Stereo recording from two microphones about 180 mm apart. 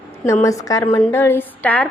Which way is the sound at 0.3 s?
15° left (ahead or behind).